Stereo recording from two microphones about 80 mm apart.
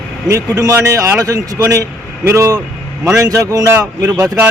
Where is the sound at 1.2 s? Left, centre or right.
Right.